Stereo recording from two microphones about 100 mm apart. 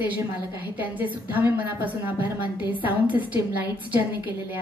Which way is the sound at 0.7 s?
15° right (ahead or behind).